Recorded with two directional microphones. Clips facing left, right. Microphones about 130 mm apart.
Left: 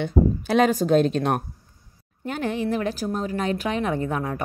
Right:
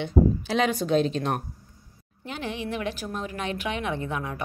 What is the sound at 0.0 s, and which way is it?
A woman's voice, 50° left (ahead or behind).